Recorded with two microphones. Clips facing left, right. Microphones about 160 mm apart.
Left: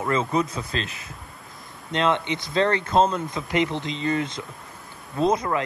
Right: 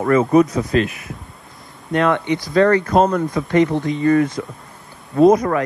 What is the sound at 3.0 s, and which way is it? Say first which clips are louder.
Speech: right 2 dB; 70° right (ahead or behind).